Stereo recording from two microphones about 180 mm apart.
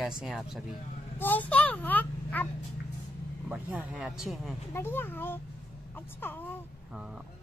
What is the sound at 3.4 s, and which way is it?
Speech, 5° right (ahead or behind).